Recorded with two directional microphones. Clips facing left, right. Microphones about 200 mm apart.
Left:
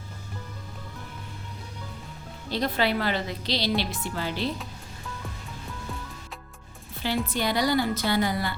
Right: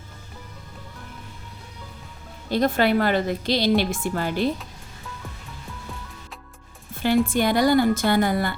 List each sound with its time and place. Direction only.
2.5 s speech: 50° right (ahead or behind)
7.3 s speech: 50° right (ahead or behind)